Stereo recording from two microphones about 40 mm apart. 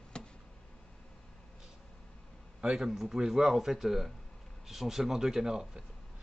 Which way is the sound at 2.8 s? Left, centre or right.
Centre.